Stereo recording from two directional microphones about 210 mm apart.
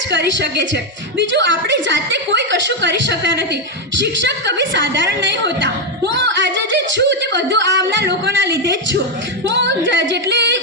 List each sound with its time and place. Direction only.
0.1 s a woman's voice: 55° right (ahead or behind)